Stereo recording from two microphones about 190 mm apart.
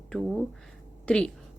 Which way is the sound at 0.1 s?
Centre (ahead or behind).